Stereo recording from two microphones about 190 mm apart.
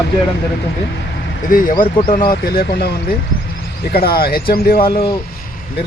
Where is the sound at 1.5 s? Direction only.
45° left (ahead or behind).